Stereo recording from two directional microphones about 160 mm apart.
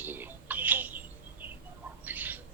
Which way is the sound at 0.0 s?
10° right (ahead or behind).